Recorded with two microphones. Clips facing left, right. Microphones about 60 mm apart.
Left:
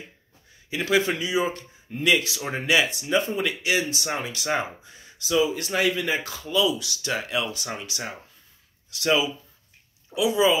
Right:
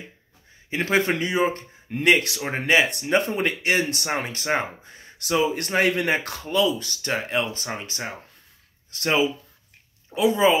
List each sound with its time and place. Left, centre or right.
0.7 s speech: right
2.4 s speech: right
2.9 s speech: right